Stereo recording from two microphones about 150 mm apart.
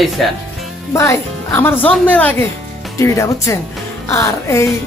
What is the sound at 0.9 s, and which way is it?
A woman's voice, 20° left (ahead or behind).